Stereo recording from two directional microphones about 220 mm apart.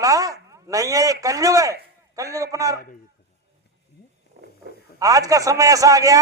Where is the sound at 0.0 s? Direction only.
15° right (ahead or behind).